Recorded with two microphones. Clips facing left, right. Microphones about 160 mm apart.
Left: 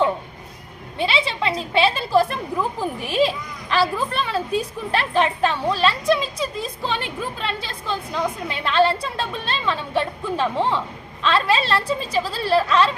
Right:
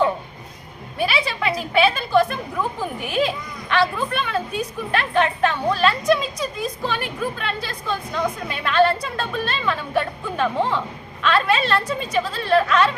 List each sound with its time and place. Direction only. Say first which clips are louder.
0.9 s a woman's voice: even; 25° left (ahead or behind)
10.6 s speech: even; centre (ahead or behind)
11.2 s speech: even; 30° left (ahead or behind)